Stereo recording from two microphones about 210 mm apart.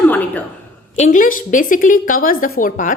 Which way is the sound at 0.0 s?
10° left (ahead or behind).